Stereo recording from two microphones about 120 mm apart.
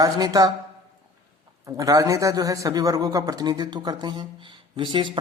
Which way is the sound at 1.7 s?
30° right (ahead or behind).